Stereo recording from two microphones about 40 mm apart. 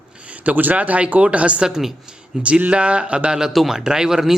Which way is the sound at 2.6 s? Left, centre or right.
Right.